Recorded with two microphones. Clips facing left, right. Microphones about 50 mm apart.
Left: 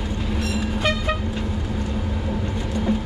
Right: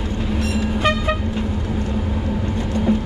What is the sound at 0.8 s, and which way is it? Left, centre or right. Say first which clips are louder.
Vehicle: right 4 dB; centre.